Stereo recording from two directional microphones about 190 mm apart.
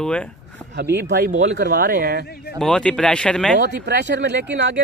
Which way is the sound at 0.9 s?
60° right (ahead or behind).